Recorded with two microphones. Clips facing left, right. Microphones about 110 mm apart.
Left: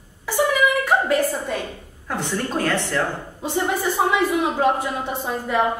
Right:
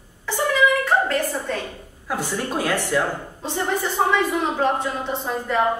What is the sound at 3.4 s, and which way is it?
A woman's voice, 10° left (ahead or behind).